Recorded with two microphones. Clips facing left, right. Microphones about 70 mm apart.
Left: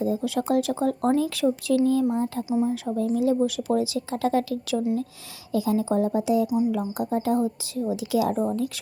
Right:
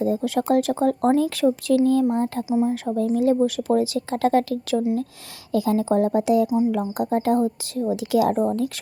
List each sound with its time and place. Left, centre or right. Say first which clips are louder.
0.0 s speech: right 3 dB; right
2.5 s speech: right 3 dB; right
2.8 s speech: right 3 dB; right
5.5 s speech: right 3 dB; right